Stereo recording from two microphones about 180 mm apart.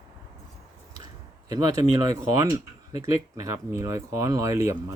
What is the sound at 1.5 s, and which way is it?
Speech, 20° right (ahead or behind).